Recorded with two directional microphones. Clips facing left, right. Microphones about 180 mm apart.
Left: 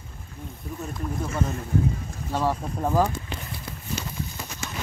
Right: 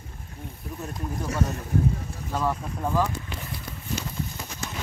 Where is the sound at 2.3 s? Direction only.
30° left (ahead or behind).